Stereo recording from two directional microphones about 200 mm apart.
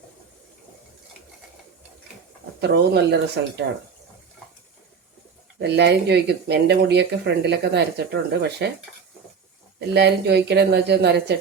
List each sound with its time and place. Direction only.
2.6 s speech: 55° right (ahead or behind)
5.5 s speech: 60° right (ahead or behind)
9.9 s speech: 55° right (ahead or behind)